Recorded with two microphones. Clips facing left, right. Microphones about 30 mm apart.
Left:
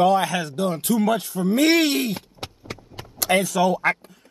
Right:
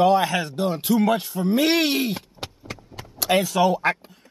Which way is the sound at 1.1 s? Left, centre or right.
Centre.